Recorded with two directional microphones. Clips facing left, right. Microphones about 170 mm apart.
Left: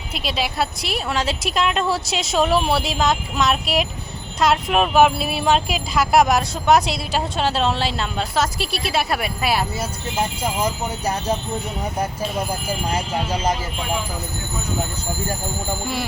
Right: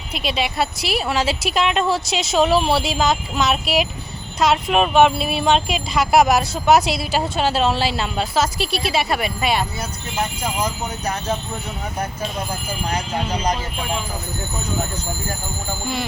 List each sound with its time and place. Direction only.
0.1 s speech: centre (ahead or behind)
12.9 s speech: 5° left (ahead or behind)